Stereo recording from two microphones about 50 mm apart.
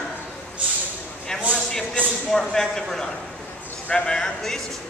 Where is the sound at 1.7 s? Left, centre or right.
Centre.